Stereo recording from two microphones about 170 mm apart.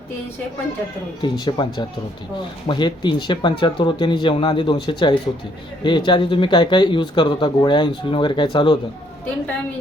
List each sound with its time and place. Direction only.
1.2 s speech: 25° left (ahead or behind)